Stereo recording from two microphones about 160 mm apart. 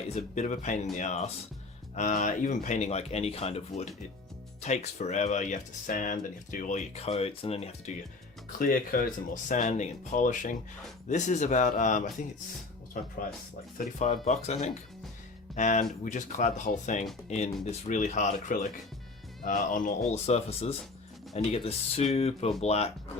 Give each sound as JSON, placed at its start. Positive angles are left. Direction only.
{"t": 0.1, "sound": "speech", "side_deg": 45}
{"t": 8.5, "sound": "speech", "side_deg": 60}